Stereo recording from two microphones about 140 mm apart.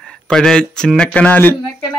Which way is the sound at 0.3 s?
5° left (ahead or behind).